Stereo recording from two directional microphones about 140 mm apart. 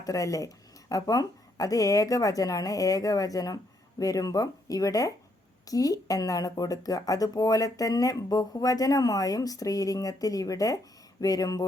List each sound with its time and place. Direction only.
0.0 s speech: 25° left (ahead or behind)